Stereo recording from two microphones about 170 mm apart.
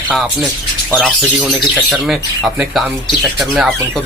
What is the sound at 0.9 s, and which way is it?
Speech, centre (ahead or behind).